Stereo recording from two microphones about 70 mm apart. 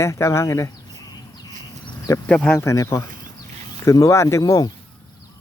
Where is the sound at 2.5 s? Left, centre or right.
Left.